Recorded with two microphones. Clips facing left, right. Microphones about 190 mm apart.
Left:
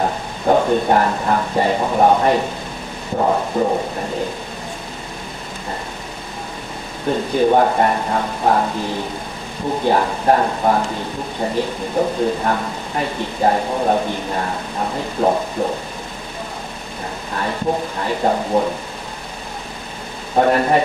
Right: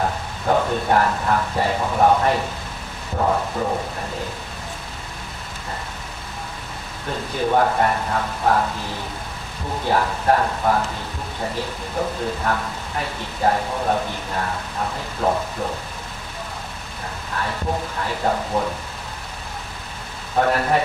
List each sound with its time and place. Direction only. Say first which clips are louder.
0.0 s speech: left 4 dB; 20° left (ahead or behind)
7.1 s speech: left 7 dB; 20° left (ahead or behind)
9.8 s speech: left 3 dB; 20° left (ahead or behind)
12.0 s speech: left 6 dB; 25° left (ahead or behind)
18.0 s speech: left 5 dB; 20° left (ahead or behind)
20.3 s speech: left 4 dB; 20° left (ahead or behind)